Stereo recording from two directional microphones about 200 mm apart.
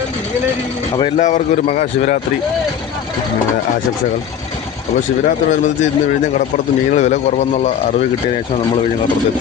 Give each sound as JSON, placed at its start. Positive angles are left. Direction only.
{"t": 1.2, "sound": "a man's voice", "side_deg": 40}
{"t": 5.2, "sound": "a man's voice", "side_deg": 40}
{"t": 6.9, "sound": "a man's voice", "side_deg": 35}